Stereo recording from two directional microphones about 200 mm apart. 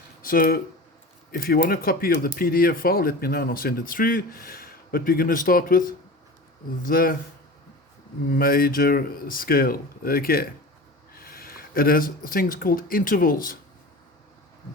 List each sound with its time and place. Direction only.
0.2 s speech: 45° left (ahead or behind)
8.3 s speech: 45° left (ahead or behind)